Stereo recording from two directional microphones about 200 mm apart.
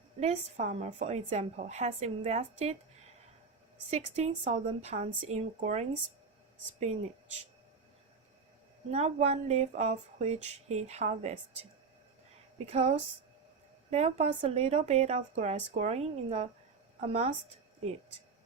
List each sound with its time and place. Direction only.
0.2 s a woman's voice: 35° right (ahead or behind)
3.8 s a woman's voice: 30° right (ahead or behind)
8.9 s a woman's voice: 35° right (ahead or behind)
12.5 s a woman's voice: 35° right (ahead or behind)